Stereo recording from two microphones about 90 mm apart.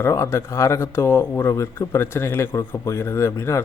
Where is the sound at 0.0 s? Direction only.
30° left (ahead or behind).